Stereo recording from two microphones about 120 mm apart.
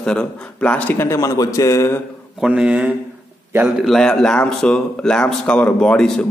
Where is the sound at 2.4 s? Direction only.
5° right (ahead or behind).